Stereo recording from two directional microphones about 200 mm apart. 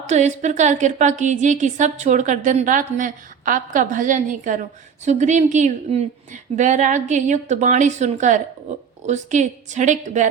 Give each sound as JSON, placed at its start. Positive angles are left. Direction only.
{"t": 0.1, "sound": "a woman's voice", "side_deg": -35}